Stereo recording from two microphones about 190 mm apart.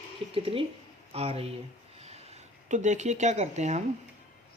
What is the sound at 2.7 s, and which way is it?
Speech, 40° right (ahead or behind).